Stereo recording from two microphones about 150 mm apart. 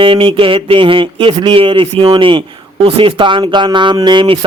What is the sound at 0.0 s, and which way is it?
A man's voice, 35° right (ahead or behind).